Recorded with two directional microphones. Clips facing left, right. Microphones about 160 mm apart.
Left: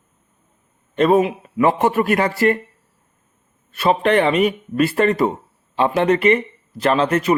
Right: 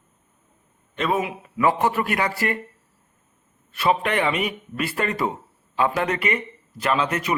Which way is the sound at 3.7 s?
30° left (ahead or behind).